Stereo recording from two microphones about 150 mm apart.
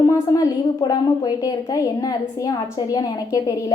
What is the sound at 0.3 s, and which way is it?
A woman's voice, 25° left (ahead or behind).